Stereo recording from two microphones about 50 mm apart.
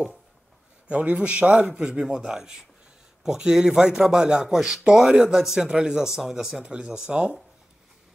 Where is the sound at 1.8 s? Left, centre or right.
Centre.